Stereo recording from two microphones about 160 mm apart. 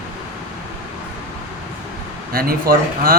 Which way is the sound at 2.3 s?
65° right (ahead or behind).